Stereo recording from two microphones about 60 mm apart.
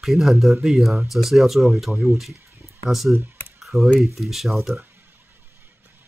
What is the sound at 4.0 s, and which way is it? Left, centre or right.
Speech, centre.